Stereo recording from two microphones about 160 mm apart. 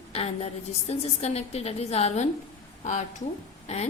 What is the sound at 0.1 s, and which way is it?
A woman's voice, 40° left (ahead or behind).